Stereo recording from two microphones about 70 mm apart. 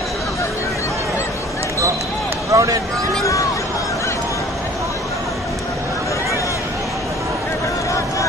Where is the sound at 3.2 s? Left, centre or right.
Left.